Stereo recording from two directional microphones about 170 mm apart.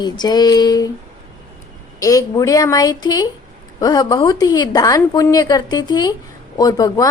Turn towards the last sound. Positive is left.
turn(degrees=20)  # may be behind; listen again after turning